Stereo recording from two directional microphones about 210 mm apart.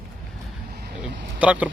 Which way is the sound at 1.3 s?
5° right (ahead or behind).